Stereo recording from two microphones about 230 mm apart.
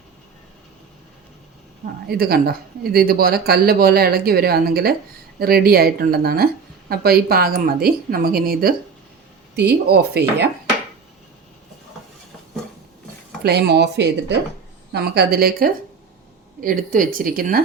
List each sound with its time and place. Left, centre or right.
2.0 s speech: right
13.4 s speech: right